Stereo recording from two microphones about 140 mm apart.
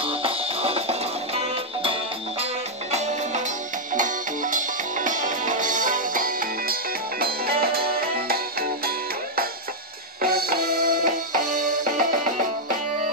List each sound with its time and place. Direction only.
0.0 s music: 40° right (ahead or behind)
2.9 s music: 55° right (ahead or behind)
3.9 s music: 70° right (ahead or behind); by 8.9 s 90° right
10.2 s music: 90° right; by 12.7 s 70° right (ahead or behind)